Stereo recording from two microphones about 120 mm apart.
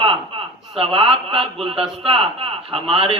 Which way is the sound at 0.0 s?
50° right (ahead or behind).